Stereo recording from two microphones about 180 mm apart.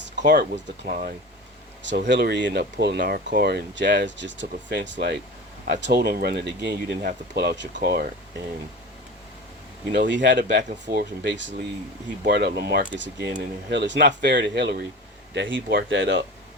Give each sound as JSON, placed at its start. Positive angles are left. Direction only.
{"t": 0.3, "sound": "speech", "side_deg": -65}
{"t": 1.8, "sound": "speech", "side_deg": -80}
{"t": 10.1, "sound": "speech", "side_deg": -75}
{"t": 10.8, "sound": "speech", "side_deg": -60}
{"t": 12.2, "sound": "speech", "side_deg": -65}
{"t": 15.4, "sound": "speech", "side_deg": -80}